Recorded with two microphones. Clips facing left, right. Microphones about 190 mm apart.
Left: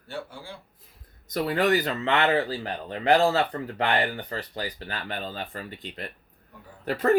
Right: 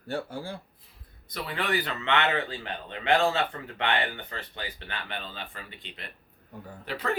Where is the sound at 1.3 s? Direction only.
40° left (ahead or behind).